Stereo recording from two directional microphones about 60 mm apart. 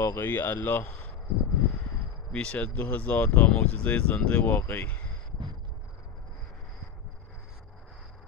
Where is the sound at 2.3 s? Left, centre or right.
Centre.